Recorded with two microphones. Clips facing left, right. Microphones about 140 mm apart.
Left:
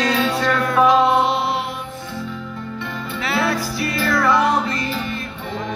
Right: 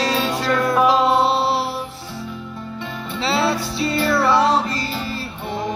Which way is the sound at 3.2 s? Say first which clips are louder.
Right 2 dB; 30° right (ahead or behind).